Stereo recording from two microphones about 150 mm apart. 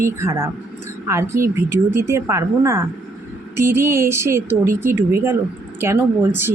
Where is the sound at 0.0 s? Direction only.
15° right (ahead or behind).